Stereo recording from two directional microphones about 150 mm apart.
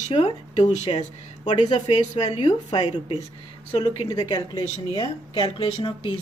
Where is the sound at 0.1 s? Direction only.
40° left (ahead or behind).